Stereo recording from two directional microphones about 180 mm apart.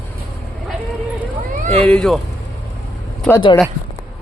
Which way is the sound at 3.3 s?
10° left (ahead or behind).